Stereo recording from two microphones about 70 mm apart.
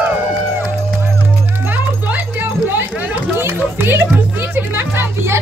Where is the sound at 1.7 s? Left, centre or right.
Right.